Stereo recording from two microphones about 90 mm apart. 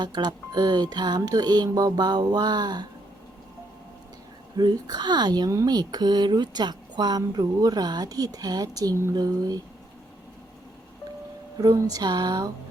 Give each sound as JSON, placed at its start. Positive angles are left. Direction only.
{"t": 0.0, "sound": "speech", "side_deg": -50}
{"t": 4.5, "sound": "speech", "side_deg": -50}
{"t": 11.5, "sound": "speech", "side_deg": -35}